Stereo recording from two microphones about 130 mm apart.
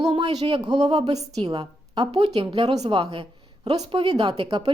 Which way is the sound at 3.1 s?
40° right (ahead or behind).